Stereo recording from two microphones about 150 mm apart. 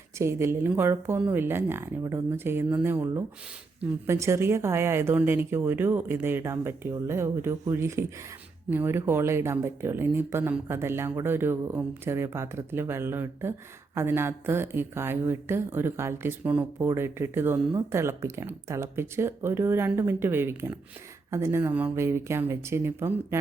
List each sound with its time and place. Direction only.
0.2 s speech: 15° right (ahead or behind)